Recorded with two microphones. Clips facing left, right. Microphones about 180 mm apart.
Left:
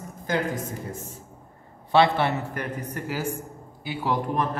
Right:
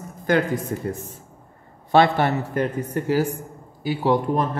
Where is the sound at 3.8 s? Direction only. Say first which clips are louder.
Right 7 dB; 40° right (ahead or behind).